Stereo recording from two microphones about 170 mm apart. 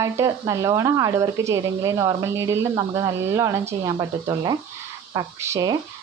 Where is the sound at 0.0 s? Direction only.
20° right (ahead or behind).